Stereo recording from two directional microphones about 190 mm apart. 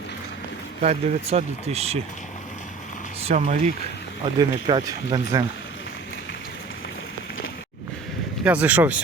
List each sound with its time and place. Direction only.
0.8 s speech: 35° right (ahead or behind)
3.2 s speech: 35° right (ahead or behind)
4.4 s speech: 20° right (ahead or behind)
8.4 s speech: 10° right (ahead or behind)